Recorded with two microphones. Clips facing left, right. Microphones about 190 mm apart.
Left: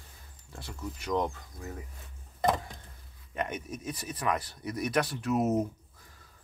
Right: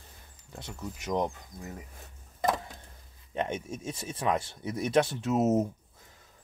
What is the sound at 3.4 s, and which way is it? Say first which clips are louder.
Speech: right 2 dB; 25° right (ahead or behind).